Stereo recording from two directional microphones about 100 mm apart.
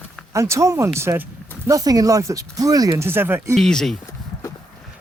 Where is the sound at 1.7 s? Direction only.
35° right (ahead or behind); by 3.5 s 20° right (ahead or behind).